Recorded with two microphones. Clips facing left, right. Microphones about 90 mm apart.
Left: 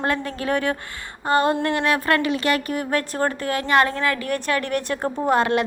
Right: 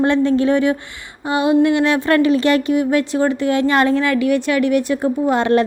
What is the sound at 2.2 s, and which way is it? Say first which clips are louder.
A woman's voice: right 7 dB; 30° right (ahead or behind).